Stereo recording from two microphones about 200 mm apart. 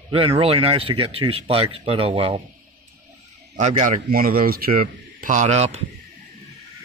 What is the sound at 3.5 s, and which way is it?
A man's voice, 40° right (ahead or behind).